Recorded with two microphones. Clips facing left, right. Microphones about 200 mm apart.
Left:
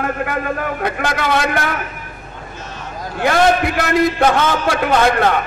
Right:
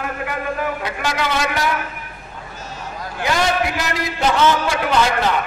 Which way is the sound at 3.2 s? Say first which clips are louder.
Left 5 dB; 55° left (ahead or behind).